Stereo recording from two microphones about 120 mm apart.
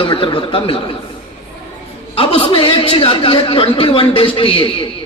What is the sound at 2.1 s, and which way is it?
A man's voice, 55° left (ahead or behind).